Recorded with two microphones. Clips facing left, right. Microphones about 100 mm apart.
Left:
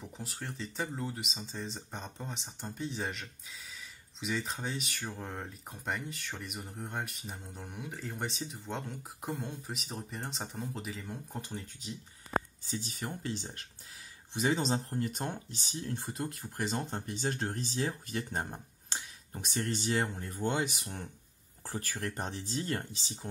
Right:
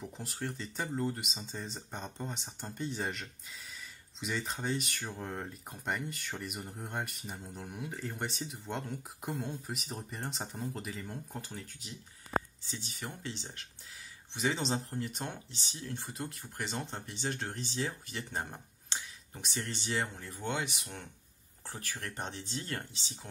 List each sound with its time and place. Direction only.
0.0 s speech: centre (ahead or behind)
12.6 s speech: 40° left (ahead or behind)
22.2 s speech: 40° left (ahead or behind)